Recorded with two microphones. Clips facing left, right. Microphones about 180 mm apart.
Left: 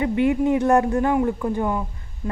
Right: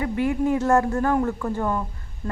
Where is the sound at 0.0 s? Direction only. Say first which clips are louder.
Left 3 dB; 20° left (ahead or behind).